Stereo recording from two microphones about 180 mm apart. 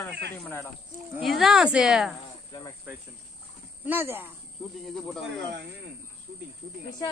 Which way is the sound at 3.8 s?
10° right (ahead or behind).